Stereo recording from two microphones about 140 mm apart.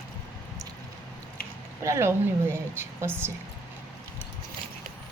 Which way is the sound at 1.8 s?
20° right (ahead or behind).